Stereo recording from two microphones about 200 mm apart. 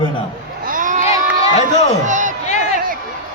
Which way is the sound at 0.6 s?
40° right (ahead or behind).